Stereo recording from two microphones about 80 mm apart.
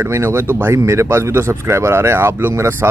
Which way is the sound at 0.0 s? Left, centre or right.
Right.